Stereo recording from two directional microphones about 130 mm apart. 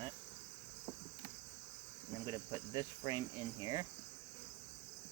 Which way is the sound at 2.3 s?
30° right (ahead or behind).